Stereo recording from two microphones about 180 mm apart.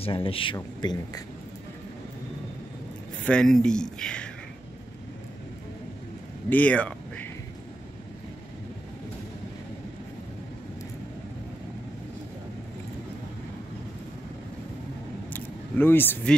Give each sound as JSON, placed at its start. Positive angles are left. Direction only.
{"t": 0.0, "sound": "speech", "side_deg": 30}
{"t": 3.3, "sound": "speech", "side_deg": 5}
{"t": 6.5, "sound": "speech", "side_deg": 10}
{"t": 15.3, "sound": "vehicle", "side_deg": 10}